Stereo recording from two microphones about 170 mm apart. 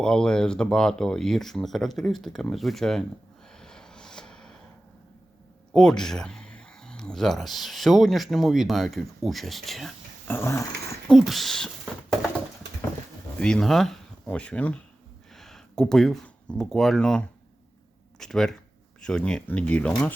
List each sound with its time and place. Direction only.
0.0 s speech: 5° left (ahead or behind)
3.5 s vehicle: 5° left (ahead or behind)
5.7 s speech: 5° left (ahead or behind)
10.2 s speech: 15° left (ahead or behind)
11.1 s speech: centre (ahead or behind)
13.4 s speech: 5° left (ahead or behind)